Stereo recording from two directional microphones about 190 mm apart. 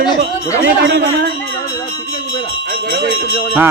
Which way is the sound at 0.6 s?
65° right (ahead or behind).